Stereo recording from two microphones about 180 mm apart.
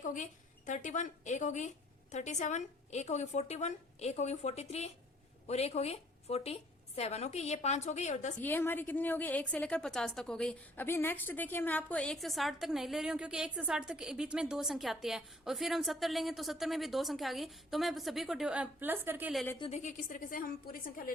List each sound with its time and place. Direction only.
0.0 s a woman's voice: 45° left (ahead or behind)
8.4 s a woman's voice: 10° left (ahead or behind); by 19.3 s 10° right (ahead or behind)
19.5 s a woman's voice: 30° left (ahead or behind)
19.8 s a woman's voice: 45° left (ahead or behind)